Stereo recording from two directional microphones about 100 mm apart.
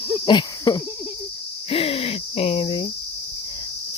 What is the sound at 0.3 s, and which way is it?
Cricket, 45° left (ahead or behind).